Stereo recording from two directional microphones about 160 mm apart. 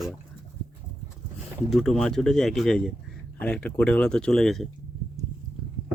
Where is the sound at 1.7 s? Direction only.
Centre (ahead or behind).